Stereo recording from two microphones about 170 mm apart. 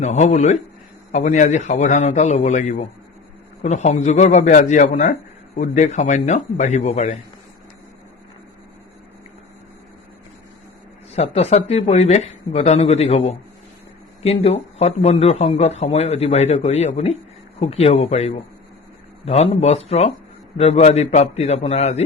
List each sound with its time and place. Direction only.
0.0 s a man's voice: 45° left (ahead or behind)
11.1 s speech: 40° left (ahead or behind)